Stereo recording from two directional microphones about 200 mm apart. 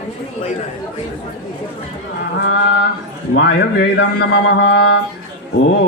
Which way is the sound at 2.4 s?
60° left (ahead or behind).